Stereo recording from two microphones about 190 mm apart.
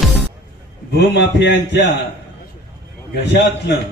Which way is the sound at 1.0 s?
65° left (ahead or behind).